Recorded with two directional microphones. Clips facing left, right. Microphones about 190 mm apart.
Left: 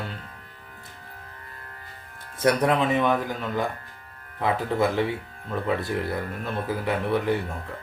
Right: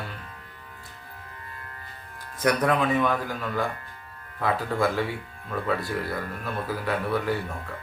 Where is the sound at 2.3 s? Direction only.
25° left (ahead or behind).